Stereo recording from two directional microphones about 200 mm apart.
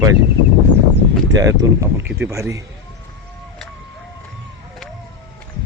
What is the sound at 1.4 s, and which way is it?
Speech, 15° right (ahead or behind).